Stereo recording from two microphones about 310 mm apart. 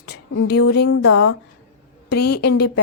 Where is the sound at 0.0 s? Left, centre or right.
Left.